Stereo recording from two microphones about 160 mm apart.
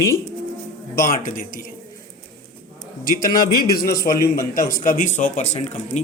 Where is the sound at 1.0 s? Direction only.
60° left (ahead or behind).